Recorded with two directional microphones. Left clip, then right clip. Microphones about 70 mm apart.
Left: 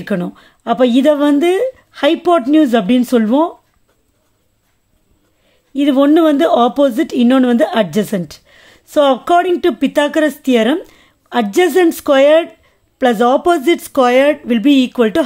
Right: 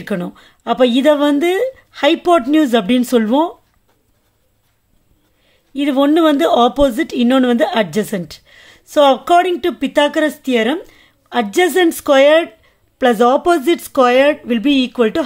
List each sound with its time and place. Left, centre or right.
0.0 s speech: left
2.2 s speech: centre
5.5 s a woman's voice: left
11.5 s speech: left
12.6 s speech: centre